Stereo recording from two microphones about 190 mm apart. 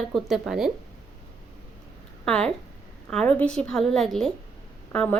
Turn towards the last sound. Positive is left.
turn(degrees=5)  # may be behind; listen again after turning